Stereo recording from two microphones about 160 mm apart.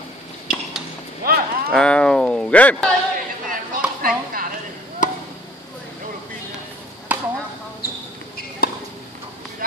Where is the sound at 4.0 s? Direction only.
60° right (ahead or behind).